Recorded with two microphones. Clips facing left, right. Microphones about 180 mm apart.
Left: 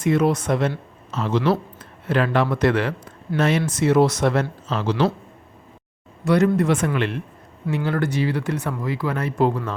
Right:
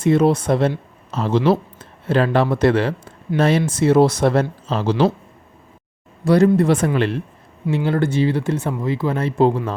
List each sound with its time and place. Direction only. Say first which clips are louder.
0.0 s speech: right 4 dB; 30° right (ahead or behind)
6.2 s speech: right 4 dB; 30° right (ahead or behind)